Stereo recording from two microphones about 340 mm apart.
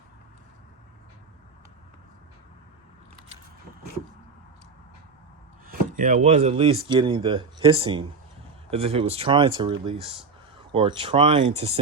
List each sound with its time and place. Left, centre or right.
5.6 s speech: right